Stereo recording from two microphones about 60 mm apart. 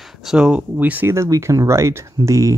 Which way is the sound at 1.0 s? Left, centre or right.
Right.